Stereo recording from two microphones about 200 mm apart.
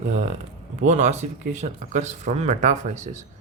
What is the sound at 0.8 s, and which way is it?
Speech, 35° right (ahead or behind).